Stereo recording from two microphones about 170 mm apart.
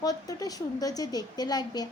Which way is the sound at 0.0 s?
20° left (ahead or behind).